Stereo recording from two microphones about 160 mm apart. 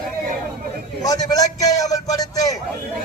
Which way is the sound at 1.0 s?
20° left (ahead or behind).